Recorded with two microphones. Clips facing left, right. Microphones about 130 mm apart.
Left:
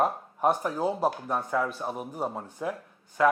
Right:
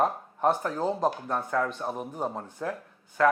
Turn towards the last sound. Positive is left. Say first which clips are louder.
# even
turn(degrees=10)  # may be behind; listen again after turning